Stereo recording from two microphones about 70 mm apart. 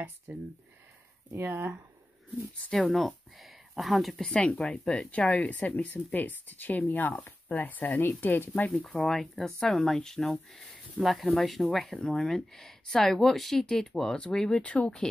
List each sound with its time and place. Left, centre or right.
0.3 s speech: right
2.7 s speech: centre
4.2 s speech: centre
8.9 s speech: centre